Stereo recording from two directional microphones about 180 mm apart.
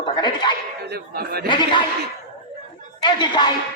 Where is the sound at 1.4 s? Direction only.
25° left (ahead or behind).